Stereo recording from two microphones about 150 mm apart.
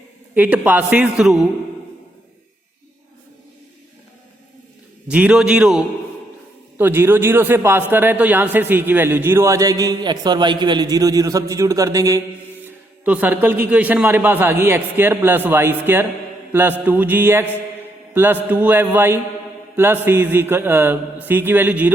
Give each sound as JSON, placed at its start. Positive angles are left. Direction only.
{"t": 0.3, "sound": "a man's voice", "side_deg": -10}
{"t": 5.0, "sound": "a man's voice", "side_deg": -10}
{"t": 12.6, "sound": "a man's voice", "side_deg": -10}
{"t": 18.1, "sound": "mantra", "side_deg": -15}
{"t": 18.4, "sound": "a man's voice", "side_deg": -10}